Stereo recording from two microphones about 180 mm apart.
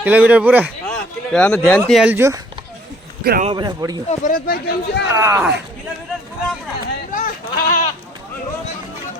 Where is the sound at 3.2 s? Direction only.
60° right (ahead or behind).